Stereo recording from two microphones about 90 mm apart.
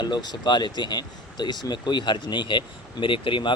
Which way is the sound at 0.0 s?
50° left (ahead or behind).